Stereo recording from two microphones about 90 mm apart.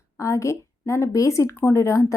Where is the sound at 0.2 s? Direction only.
35° left (ahead or behind).